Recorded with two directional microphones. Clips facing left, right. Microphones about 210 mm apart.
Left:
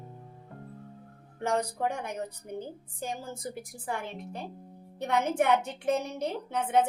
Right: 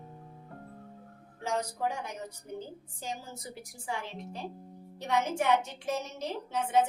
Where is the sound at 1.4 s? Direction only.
60° left (ahead or behind).